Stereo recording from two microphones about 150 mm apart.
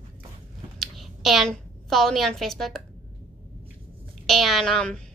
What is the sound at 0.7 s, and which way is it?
A woman's voice, centre (ahead or behind).